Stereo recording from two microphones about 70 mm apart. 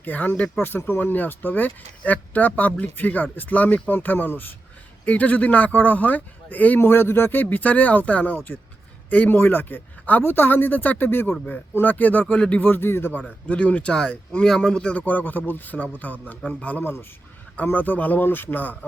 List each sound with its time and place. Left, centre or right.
0.0 s speech: left
6.7 s speech: left
12.6 s speech: left
13.5 s speech: centre